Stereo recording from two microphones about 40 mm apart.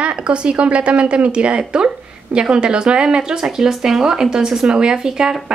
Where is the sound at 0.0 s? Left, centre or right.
Right.